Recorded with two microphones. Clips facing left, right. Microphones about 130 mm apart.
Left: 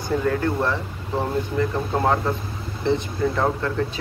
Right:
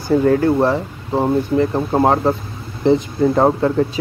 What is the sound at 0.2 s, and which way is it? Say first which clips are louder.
Speech: right 9 dB; 40° right (ahead or behind).